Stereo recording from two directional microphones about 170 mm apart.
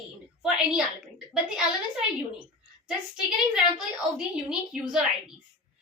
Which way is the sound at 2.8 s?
5° right (ahead or behind).